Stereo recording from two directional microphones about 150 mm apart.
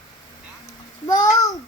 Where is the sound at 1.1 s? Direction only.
25° left (ahead or behind).